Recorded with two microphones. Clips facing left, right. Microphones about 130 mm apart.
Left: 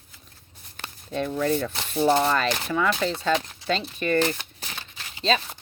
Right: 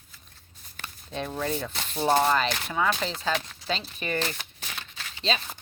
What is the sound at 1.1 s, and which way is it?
Rub, 50° left (ahead or behind).